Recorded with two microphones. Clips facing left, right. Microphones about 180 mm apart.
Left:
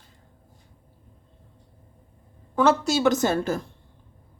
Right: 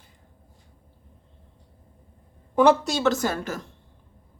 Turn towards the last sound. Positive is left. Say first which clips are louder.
# left 4 dB
turn(degrees=25)  # may be behind; listen again after turning